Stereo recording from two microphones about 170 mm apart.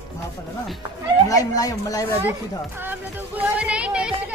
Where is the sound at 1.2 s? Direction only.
20° left (ahead or behind).